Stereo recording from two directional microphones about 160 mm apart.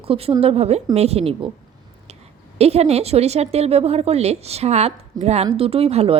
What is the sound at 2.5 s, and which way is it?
Speech, 40° right (ahead or behind).